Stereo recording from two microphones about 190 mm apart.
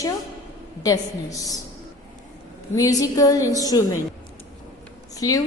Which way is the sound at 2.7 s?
20° left (ahead or behind).